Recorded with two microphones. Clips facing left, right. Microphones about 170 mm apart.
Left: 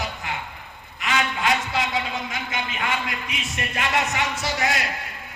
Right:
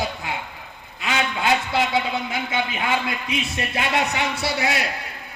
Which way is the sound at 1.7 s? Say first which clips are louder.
Right 4 dB; 70° right (ahead or behind).